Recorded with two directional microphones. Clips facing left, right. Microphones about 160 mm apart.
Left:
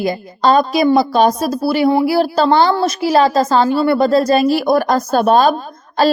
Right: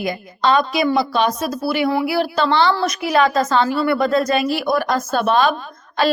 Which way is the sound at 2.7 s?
30° left (ahead or behind).